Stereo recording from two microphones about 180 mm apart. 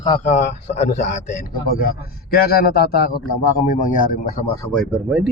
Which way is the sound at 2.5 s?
60° left (ahead or behind).